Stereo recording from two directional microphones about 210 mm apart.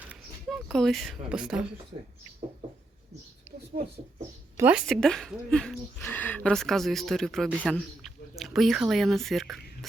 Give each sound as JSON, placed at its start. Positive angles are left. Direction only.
{"t": 0.1, "sound": "a sound", "side_deg": 0}
{"t": 3.7, "sound": "speech", "side_deg": -40}
{"t": 4.5, "sound": "a woman's voice", "side_deg": -10}
{"t": 4.9, "sound": "speech", "side_deg": 0}